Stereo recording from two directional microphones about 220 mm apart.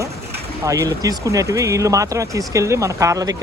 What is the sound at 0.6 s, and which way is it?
Speech, 15° right (ahead or behind).